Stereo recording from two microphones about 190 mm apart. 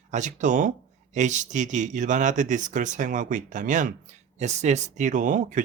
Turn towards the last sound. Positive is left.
turn(degrees=-40)  # may be behind; listen again after turning